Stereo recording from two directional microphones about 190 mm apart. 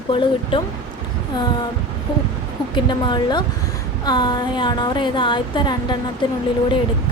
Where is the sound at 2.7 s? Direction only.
25° left (ahead or behind).